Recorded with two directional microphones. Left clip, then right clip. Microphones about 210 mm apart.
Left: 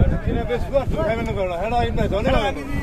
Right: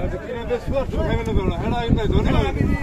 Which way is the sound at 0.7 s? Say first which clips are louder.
Left 3 dB; 50° left (ahead or behind).